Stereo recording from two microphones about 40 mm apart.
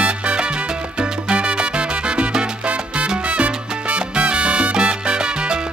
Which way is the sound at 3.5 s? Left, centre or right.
Right.